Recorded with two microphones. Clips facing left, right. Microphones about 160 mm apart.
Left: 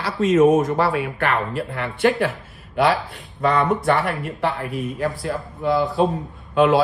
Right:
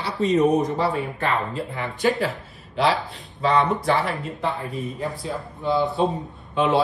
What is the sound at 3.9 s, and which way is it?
Speech, 70° left (ahead or behind).